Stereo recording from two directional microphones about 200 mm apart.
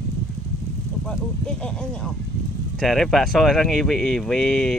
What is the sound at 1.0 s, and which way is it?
Speech, 5° left (ahead or behind).